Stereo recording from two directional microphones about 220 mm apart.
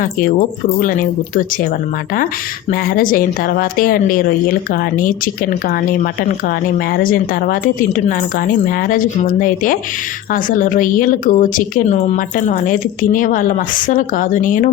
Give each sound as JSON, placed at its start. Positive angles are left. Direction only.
{"t": 0.0, "sound": "a woman's voice", "side_deg": 35}
{"t": 2.9, "sound": "a woman's voice", "side_deg": 40}
{"t": 6.9, "sound": "a woman's voice", "side_deg": 40}